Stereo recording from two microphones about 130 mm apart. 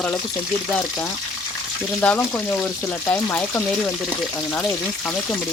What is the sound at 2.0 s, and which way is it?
Speech, 15° left (ahead or behind).